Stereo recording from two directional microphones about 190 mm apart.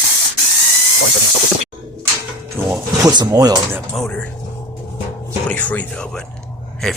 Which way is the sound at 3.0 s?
20° right (ahead or behind).